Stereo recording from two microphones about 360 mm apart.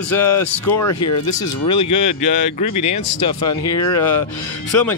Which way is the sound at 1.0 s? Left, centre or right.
Left.